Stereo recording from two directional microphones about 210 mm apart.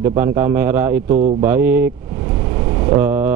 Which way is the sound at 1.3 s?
10° right (ahead or behind).